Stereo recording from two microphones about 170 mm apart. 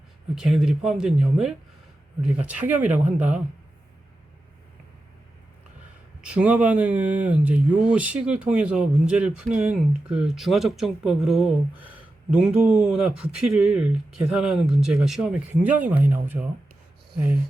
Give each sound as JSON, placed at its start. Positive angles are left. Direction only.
{"t": 0.3, "sound": "speech", "side_deg": -5}
{"t": 6.2, "sound": "speech", "side_deg": -5}